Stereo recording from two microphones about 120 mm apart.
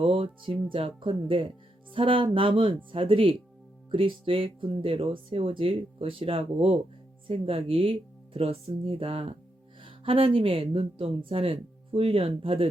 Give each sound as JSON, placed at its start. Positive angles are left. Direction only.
{"t": 0.0, "sound": "speech", "side_deg": -50}